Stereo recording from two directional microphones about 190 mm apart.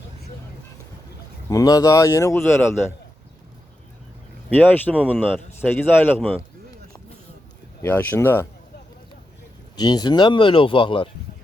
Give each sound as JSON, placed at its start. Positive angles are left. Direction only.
{"t": 1.5, "sound": "speech", "side_deg": 20}
{"t": 4.5, "sound": "speech", "side_deg": 10}
{"t": 7.8, "sound": "speech", "side_deg": 10}
{"t": 9.7, "sound": "speech", "side_deg": 20}